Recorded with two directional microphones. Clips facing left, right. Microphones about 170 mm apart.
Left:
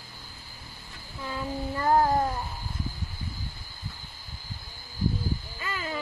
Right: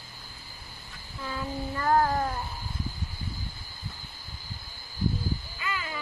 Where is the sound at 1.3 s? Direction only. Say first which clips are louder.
Left 1 dB; 20° left (ahead or behind).